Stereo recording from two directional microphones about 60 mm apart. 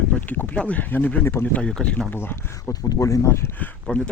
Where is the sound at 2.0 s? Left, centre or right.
Left.